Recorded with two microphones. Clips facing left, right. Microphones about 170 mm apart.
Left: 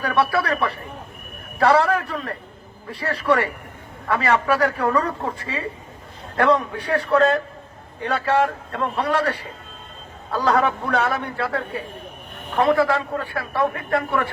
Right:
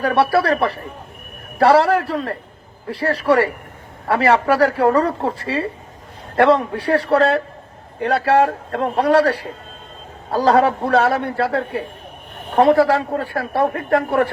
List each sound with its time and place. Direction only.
0.0 s a man's voice: 35° right (ahead or behind)